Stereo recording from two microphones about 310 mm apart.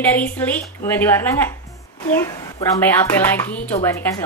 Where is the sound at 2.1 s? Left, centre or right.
Centre.